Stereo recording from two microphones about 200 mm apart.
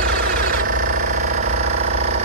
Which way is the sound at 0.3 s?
45° right (ahead or behind).